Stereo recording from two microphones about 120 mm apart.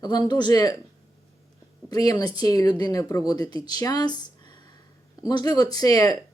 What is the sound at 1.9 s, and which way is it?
Speech, 30° left (ahead or behind).